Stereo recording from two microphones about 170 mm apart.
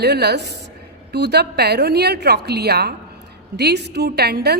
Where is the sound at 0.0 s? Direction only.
75° right (ahead or behind).